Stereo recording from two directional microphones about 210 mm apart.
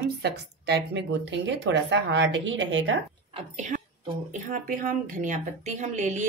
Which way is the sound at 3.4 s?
35° right (ahead or behind).